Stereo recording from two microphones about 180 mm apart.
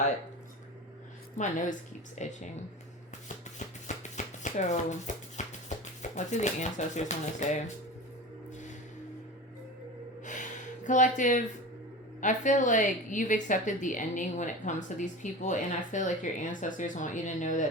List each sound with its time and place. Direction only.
1.4 s a woman's voice: 45° left (ahead or behind)
3.8 s chopping: 45° left (ahead or behind)
10.8 s a woman's voice: 45° left (ahead or behind)